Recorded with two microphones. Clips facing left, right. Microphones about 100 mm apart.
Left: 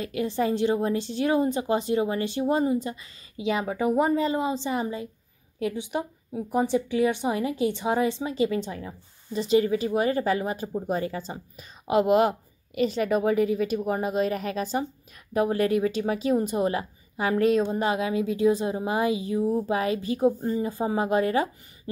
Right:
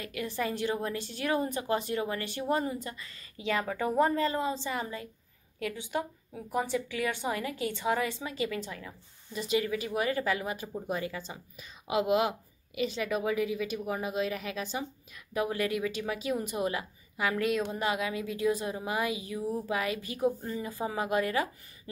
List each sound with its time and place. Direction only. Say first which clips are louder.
0.0 s a woman's voice: left 7 dB; 25° left (ahead or behind)